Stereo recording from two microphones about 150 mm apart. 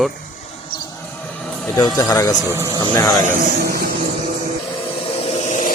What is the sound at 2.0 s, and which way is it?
Speech, 25° left (ahead or behind).